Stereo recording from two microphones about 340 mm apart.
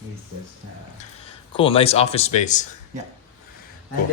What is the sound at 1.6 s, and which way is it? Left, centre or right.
Speech, centre.